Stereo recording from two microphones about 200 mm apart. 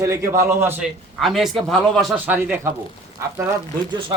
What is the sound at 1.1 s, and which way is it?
A man's voice, centre (ahead or behind).